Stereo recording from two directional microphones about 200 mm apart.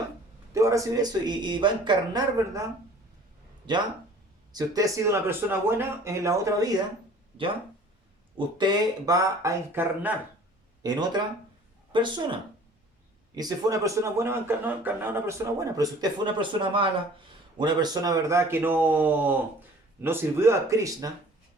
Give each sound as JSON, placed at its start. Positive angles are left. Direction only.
{"t": 0.5, "sound": "speech", "side_deg": -15}
{"t": 4.5, "sound": "a man's voice", "side_deg": -20}
{"t": 8.4, "sound": "a man's voice", "side_deg": -20}
{"t": 10.8, "sound": "a man's voice", "side_deg": -20}